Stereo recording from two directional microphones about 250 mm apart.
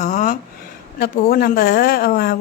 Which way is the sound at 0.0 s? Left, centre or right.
Left.